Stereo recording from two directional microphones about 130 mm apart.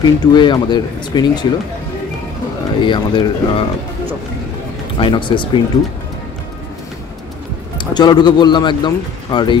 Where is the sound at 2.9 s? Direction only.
35° left (ahead or behind).